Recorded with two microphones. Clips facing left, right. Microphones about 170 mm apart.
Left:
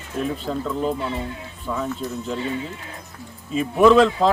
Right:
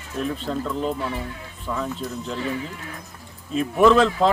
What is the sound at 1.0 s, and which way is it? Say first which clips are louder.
Speech: left 1 dB; 25° left (ahead or behind).